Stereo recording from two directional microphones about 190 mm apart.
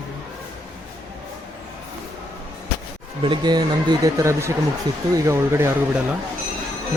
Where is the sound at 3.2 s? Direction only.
25° right (ahead or behind).